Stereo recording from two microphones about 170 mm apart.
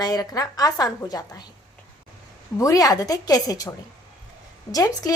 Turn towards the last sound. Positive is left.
turn(degrees=20)  # may be behind; listen again after turning